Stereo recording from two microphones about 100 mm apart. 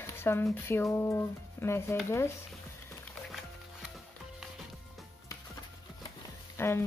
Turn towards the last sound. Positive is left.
turn(degrees=25)  # may be behind; listen again after turning